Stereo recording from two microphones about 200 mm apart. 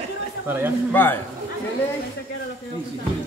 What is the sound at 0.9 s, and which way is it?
Speech, 10° left (ahead or behind).